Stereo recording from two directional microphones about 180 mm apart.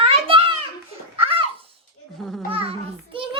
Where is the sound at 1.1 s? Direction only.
30° right (ahead or behind).